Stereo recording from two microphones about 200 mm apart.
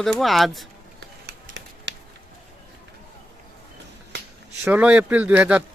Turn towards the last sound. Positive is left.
turn(degrees=-5)  # may be behind; listen again after turning